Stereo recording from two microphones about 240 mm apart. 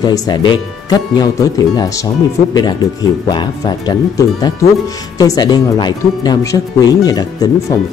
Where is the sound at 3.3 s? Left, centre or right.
Centre.